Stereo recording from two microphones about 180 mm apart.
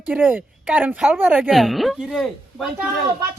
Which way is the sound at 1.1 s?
5° right (ahead or behind).